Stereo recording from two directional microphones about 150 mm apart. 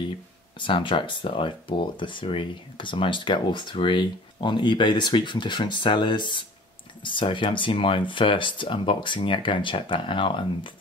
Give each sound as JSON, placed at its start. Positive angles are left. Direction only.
{"t": 0.6, "sound": "speech", "side_deg": 35}